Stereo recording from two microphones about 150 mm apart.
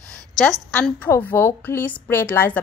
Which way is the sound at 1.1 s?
15° left (ahead or behind).